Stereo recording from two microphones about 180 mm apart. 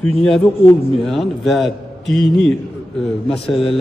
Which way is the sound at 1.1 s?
Centre (ahead or behind).